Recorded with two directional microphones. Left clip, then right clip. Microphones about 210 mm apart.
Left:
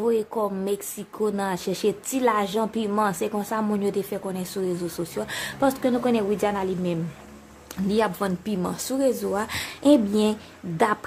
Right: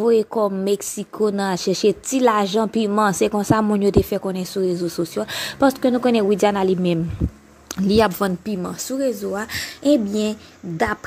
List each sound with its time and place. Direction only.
0.0 s speech: 25° right (ahead or behind)
8.5 s a woman's voice: 10° right (ahead or behind)